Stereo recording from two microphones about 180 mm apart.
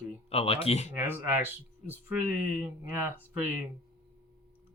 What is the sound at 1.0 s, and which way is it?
Speech, 10° right (ahead or behind).